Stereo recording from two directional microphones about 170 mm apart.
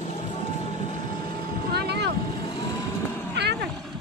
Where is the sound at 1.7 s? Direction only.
75° right (ahead or behind).